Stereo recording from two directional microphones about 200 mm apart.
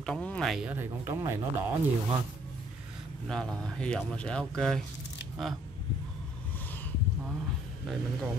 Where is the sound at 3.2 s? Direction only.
5° left (ahead or behind).